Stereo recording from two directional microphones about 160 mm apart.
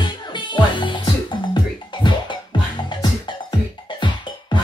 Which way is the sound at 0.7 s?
30° left (ahead or behind).